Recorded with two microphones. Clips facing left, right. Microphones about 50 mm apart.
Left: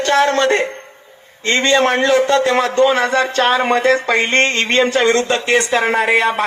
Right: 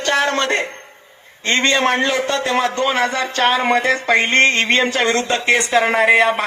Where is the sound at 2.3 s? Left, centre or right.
Left.